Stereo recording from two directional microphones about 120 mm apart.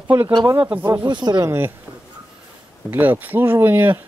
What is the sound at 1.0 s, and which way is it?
Speech, 40° right (ahead or behind).